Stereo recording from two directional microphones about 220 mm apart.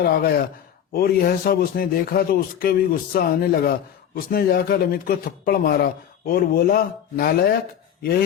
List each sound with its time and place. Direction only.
0.1 s a man's voice: 45° left (ahead or behind)